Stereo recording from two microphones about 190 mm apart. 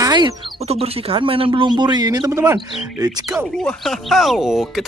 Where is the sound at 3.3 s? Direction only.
5° left (ahead or behind).